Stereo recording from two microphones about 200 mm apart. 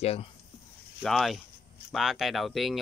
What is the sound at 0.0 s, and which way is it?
Speech, 30° left (ahead or behind).